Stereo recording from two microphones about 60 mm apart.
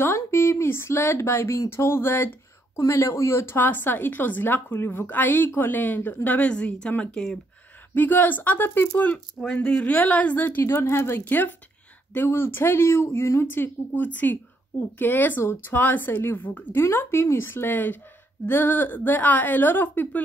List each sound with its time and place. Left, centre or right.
0.1 s speech: left
2.8 s speech: left
3.5 s a woman's voice: left; by 6.9 s centre
7.9 s a woman's voice: left
9.4 s a woman's voice: centre; by 10.6 s left
10.6 s a woman's voice: left
16.8 s a woman's voice: left